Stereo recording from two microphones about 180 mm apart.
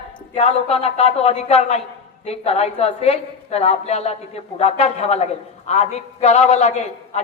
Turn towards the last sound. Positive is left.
turn(degrees=40)  # may be behind; listen again after turning